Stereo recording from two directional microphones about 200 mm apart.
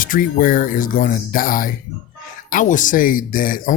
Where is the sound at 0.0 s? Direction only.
45° left (ahead or behind).